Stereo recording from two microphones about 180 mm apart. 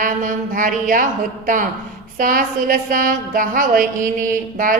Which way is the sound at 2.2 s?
50° right (ahead or behind).